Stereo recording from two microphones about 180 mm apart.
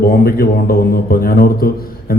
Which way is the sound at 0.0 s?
55° left (ahead or behind).